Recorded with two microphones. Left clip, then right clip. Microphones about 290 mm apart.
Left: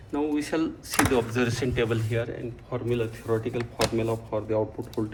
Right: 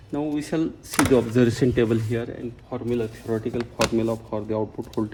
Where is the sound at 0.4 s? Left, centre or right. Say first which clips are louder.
Right 2 dB; right.